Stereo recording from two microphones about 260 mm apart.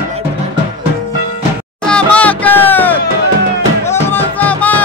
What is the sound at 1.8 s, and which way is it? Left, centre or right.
Music, centre.